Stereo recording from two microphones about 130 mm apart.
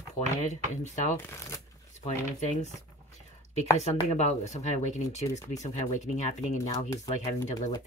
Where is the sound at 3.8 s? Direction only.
60° left (ahead or behind).